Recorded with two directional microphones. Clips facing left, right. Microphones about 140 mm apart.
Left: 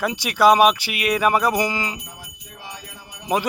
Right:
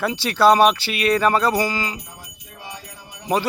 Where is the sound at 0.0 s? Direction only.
15° left (ahead or behind).